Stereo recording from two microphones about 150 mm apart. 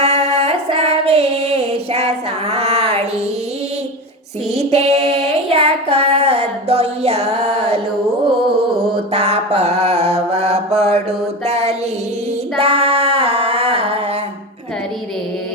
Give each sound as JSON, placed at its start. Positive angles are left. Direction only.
{"t": 0.0, "sound": "female singing", "side_deg": -45}
{"t": 4.7, "sound": "child singing", "side_deg": -45}
{"t": 9.1, "sound": "mantra", "side_deg": -45}
{"t": 11.4, "sound": "a sound", "side_deg": -45}
{"t": 12.5, "sound": "female singing", "side_deg": -40}